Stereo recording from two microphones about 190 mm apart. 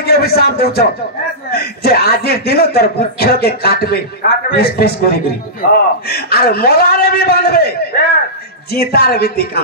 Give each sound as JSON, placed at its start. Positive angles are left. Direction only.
{"t": 0.0, "sound": "a man's voice", "side_deg": 55}
{"t": 8.7, "sound": "speech", "side_deg": 55}